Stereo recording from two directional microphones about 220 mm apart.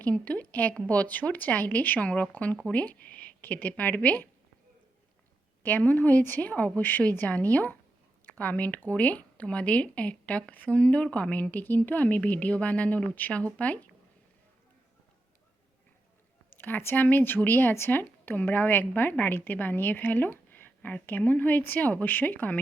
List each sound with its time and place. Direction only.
0.0 s speech: 5° left (ahead or behind)
5.6 s speech: 5° left (ahead or behind)
16.6 s speech: 10° left (ahead or behind)